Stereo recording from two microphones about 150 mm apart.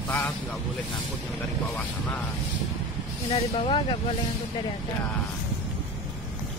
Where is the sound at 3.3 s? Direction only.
40° left (ahead or behind).